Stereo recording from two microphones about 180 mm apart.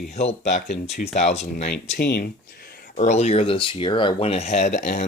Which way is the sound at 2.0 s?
70° left (ahead or behind).